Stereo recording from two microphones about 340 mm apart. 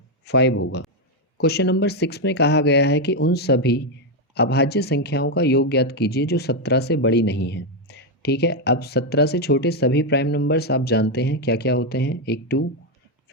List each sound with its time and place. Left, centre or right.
0.3 s speech: left